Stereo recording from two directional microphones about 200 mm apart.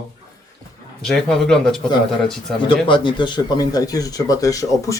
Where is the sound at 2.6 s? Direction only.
25° left (ahead or behind).